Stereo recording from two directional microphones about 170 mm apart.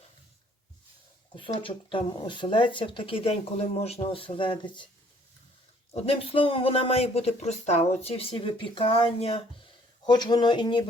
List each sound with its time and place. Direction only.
1.4 s speech: 30° left (ahead or behind)
5.9 s speech: 35° left (ahead or behind)
10.1 s speech: 25° left (ahead or behind)